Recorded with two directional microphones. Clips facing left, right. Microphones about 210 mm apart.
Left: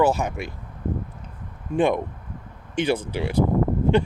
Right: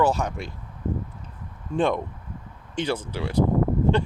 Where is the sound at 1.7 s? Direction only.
10° left (ahead or behind).